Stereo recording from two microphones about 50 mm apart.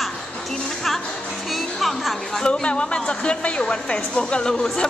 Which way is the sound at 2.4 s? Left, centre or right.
Centre.